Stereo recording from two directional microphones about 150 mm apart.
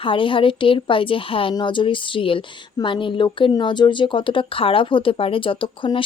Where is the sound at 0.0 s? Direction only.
35° left (ahead or behind).